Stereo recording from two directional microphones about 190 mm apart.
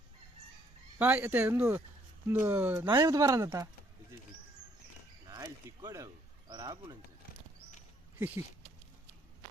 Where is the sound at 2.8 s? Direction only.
20° right (ahead or behind).